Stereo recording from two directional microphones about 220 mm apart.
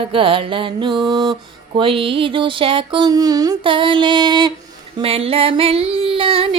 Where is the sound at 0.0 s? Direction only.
25° right (ahead or behind).